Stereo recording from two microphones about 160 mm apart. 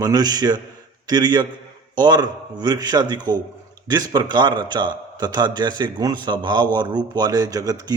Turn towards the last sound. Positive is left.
turn(degrees=-25)  # may be behind; listen again after turning